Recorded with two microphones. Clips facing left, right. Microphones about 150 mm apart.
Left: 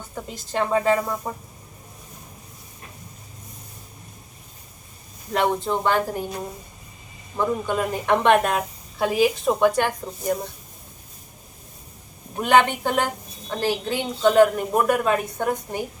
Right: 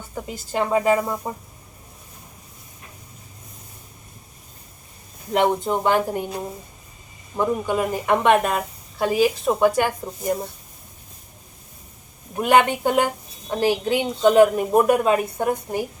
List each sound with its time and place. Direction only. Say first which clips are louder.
0.1 s a woman's voice: right 2 dB; 10° right (ahead or behind)
5.3 s a woman's voice: right 2 dB; 20° right (ahead or behind)
7.3 s a woman's voice: right 2 dB; 10° right (ahead or behind)
12.4 s a woman's voice: right 1 dB; 10° right (ahead or behind)